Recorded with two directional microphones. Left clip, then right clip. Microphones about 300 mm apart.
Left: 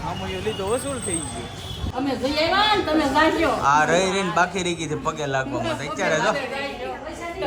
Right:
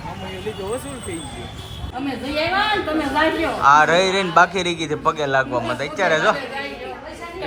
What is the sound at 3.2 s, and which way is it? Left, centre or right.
A man's voice, centre.